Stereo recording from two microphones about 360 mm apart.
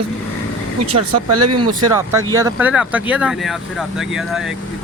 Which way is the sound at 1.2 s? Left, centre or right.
Right.